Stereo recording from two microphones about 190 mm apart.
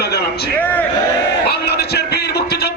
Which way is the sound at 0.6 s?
10° left (ahead or behind).